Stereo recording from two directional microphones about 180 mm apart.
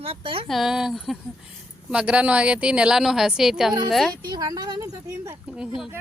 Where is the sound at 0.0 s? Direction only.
30° right (ahead or behind).